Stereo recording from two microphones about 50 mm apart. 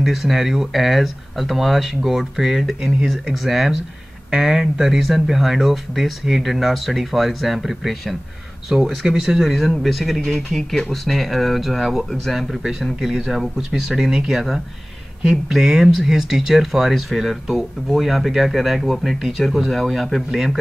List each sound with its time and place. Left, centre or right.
0.0 s speech: centre